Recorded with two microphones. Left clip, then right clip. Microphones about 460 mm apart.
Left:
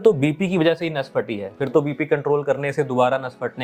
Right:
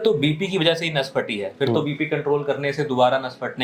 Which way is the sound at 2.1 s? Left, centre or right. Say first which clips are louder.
Left 4 dB; left.